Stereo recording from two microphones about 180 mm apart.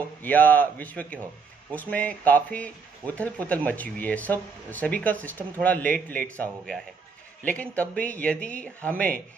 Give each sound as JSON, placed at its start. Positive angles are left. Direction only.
{"t": 0.2, "sound": "speech", "side_deg": 10}